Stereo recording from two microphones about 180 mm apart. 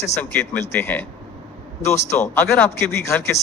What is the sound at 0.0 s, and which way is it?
Speech, 10° left (ahead or behind).